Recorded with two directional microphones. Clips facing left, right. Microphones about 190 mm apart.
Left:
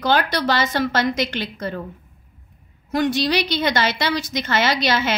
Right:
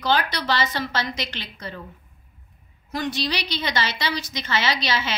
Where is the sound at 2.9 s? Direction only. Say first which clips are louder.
Left 7 dB; 50° left (ahead or behind).